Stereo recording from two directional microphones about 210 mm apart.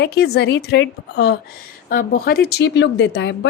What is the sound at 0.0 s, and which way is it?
A woman's voice, 50° left (ahead or behind).